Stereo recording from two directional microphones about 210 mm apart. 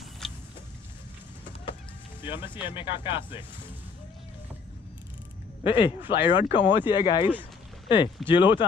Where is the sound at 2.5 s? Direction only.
25° left (ahead or behind).